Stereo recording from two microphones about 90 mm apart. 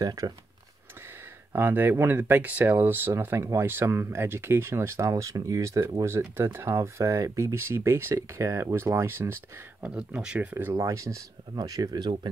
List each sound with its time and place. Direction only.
0.0 s speech: 40° right (ahead or behind)
1.5 s speech: 25° right (ahead or behind)
9.8 s speech: 10° right (ahead or behind)
10.5 s speech: 30° right (ahead or behind); by 12.3 s 55° right (ahead or behind)